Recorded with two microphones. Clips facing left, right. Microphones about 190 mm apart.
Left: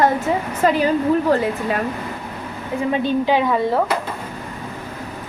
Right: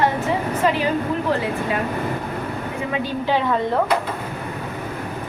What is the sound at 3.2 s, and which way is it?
Speech, 15° left (ahead or behind).